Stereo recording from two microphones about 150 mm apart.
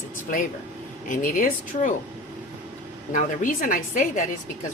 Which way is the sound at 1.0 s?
65° left (ahead or behind).